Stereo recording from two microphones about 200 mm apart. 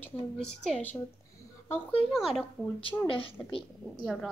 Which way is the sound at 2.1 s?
Centre (ahead or behind).